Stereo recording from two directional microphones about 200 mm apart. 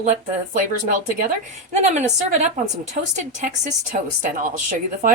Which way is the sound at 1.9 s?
35° right (ahead or behind).